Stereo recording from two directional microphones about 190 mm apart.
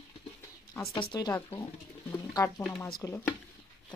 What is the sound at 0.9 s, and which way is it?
Speech, 25° left (ahead or behind).